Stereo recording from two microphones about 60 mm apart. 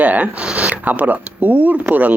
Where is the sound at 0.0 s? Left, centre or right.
Right.